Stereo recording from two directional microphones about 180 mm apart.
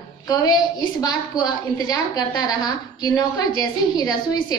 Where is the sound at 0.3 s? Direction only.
20° left (ahead or behind).